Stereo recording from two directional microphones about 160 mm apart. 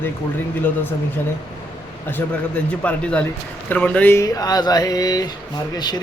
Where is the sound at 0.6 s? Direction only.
10° left (ahead or behind).